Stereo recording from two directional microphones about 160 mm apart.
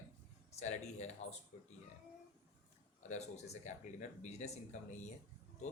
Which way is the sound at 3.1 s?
45° left (ahead or behind).